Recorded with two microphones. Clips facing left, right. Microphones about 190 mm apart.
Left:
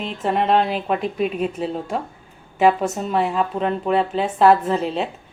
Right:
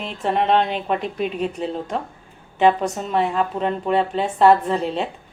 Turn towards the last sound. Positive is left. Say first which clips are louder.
# left 1 dB
turn(degrees=0)  # may be behind; listen again after turning